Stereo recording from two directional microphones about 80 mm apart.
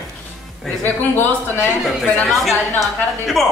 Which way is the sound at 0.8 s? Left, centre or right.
Left.